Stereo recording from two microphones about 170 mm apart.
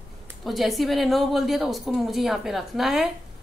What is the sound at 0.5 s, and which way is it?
A woman's voice, centre (ahead or behind).